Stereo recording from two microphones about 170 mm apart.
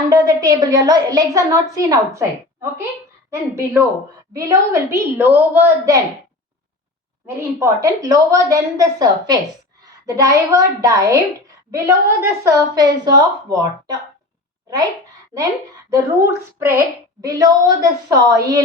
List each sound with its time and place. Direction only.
0.1 s a woman's voice: 20° right (ahead or behind)
7.3 s a woman's voice: 15° right (ahead or behind)
15.9 s a woman's voice: 15° right (ahead or behind)